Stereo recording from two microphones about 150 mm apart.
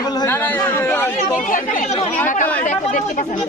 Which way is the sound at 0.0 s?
25° left (ahead or behind).